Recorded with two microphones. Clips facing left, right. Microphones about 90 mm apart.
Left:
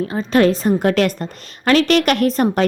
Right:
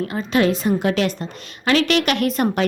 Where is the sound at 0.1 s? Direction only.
35° left (ahead or behind).